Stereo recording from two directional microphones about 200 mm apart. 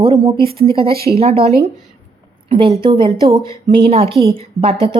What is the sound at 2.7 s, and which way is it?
A woman's voice, 25° right (ahead or behind).